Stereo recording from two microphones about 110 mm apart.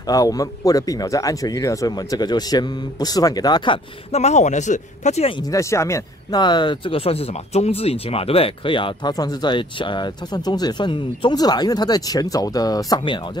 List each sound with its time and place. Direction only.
0.0 s speech: 35° left (ahead or behind)
4.1 s speech: 90° left
5.4 s speech: 30° left (ahead or behind)
6.3 s speech: 45° left (ahead or behind)
9.1 s speech: 35° left (ahead or behind)